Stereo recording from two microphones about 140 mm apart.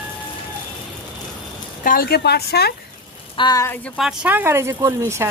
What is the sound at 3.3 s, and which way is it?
Speech, 30° left (ahead or behind).